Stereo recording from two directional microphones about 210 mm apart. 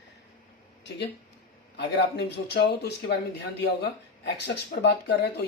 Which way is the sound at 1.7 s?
50° left (ahead or behind).